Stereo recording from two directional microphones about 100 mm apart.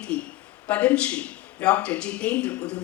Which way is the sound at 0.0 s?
10° left (ahead or behind).